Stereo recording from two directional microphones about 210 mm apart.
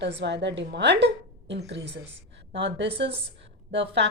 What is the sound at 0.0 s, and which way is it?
A woman's voice, 55° right (ahead or behind).